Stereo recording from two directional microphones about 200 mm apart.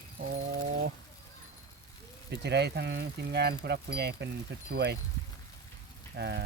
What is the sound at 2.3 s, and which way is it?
Speech, 55° right (ahead or behind).